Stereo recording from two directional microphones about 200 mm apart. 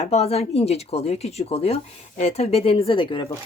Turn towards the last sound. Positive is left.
turn(degrees=25)  # may be behind; listen again after turning